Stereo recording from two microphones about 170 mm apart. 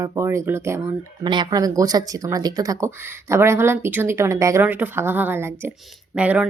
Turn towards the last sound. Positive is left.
turn(degrees=-10)  # may be behind; listen again after turning